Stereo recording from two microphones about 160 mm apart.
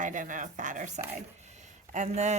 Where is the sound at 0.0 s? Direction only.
55° right (ahead or behind).